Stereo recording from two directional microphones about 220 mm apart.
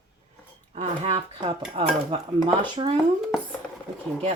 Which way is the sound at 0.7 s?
30° right (ahead or behind).